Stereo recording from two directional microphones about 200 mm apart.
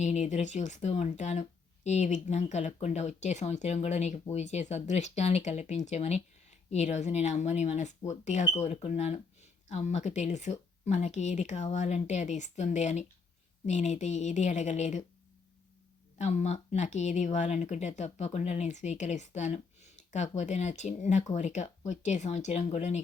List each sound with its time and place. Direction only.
0.0 s speech: 35° left (ahead or behind)
16.1 s speech: 35° left (ahead or behind)